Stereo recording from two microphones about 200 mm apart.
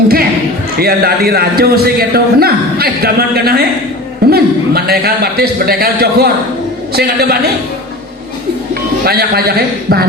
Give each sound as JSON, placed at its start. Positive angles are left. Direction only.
{"t": 0.8, "sound": "a man's voice", "side_deg": -50}
{"t": 8.7, "sound": "speech", "side_deg": -50}